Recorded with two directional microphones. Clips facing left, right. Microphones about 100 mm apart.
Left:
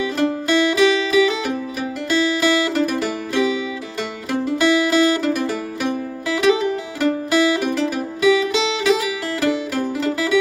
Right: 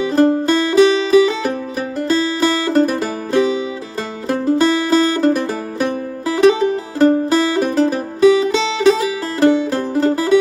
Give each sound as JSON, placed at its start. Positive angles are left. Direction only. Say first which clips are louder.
{"t": 0.1, "sound": "music", "louder": "right 9 dB", "side_deg": -35}